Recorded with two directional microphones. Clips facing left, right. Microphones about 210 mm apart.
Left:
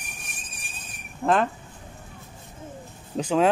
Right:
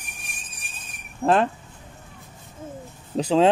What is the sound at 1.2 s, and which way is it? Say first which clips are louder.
Speech: right 2 dB; 30° right (ahead or behind).